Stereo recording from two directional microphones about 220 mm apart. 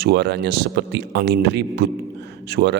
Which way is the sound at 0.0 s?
50° right (ahead or behind).